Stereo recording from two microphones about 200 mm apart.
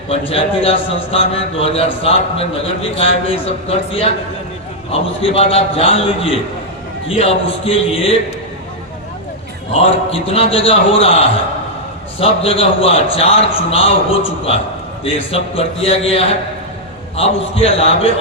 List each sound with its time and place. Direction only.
0.1 s a man's voice: 30° left (ahead or behind)
9.8 s a man's voice: 30° left (ahead or behind)